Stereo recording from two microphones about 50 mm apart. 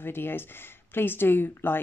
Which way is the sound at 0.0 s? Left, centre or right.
Left.